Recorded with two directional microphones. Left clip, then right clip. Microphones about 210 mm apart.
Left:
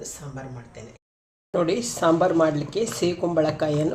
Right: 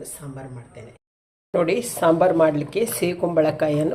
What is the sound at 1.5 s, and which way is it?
A woman's voice, 10° right (ahead or behind).